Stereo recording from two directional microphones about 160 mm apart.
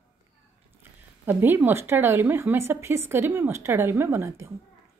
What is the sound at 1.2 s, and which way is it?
A woman's voice, 10° right (ahead or behind).